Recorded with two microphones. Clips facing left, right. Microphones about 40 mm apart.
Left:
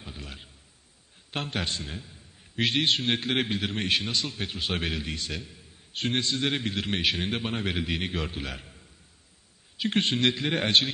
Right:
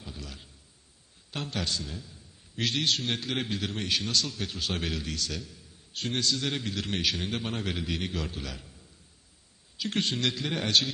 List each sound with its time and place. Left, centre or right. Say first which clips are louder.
0.0 s a man's voice: left 1 dB; left